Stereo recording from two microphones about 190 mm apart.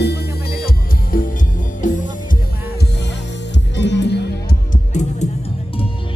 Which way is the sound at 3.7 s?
65° left (ahead or behind).